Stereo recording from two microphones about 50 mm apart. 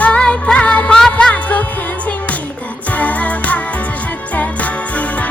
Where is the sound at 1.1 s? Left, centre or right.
Left.